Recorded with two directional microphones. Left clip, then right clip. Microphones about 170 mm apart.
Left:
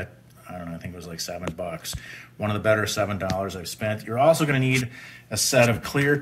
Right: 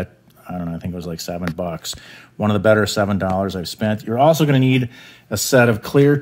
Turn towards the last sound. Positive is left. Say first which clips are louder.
# right 7 dB
turn(degrees=-55)  # may be behind; listen again after turning